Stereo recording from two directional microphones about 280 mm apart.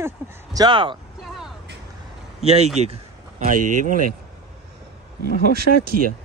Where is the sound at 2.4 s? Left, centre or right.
Right.